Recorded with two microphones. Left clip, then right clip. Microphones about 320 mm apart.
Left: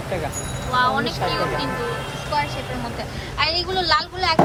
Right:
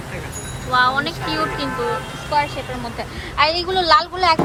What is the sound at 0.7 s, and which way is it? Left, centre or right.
Speech, centre.